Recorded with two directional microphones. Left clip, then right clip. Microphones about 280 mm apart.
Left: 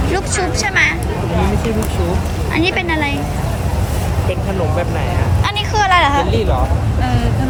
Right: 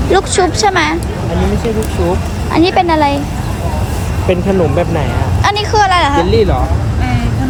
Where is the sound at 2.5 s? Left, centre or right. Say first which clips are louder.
Right 7 dB; centre.